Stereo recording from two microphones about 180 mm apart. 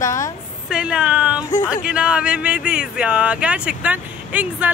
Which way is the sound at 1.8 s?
5° right (ahead or behind).